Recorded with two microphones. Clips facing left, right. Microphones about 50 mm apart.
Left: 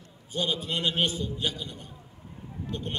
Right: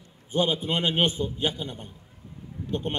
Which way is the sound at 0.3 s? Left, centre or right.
Right.